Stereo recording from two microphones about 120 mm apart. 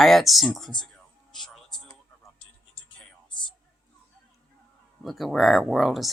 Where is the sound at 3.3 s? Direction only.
40° left (ahead or behind).